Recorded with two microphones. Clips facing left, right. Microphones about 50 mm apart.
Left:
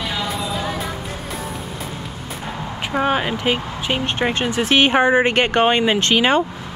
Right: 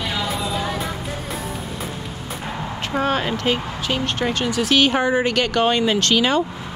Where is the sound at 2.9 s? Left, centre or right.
Centre.